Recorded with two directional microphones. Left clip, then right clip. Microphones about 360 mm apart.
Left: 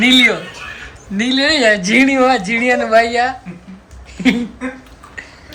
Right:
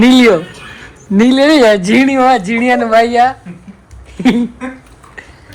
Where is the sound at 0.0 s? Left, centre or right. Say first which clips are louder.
Right 3 dB; centre.